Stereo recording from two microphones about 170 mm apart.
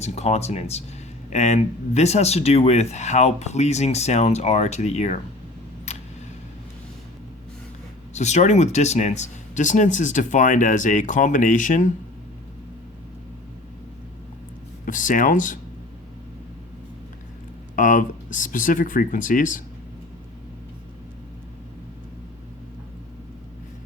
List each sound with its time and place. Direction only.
0.0 s speech: 40° left (ahead or behind)
5.9 s a sound: 45° left (ahead or behind)
8.1 s speech: 45° left (ahead or behind)
14.8 s speech: 50° left (ahead or behind)
17.7 s speech: 50° left (ahead or behind)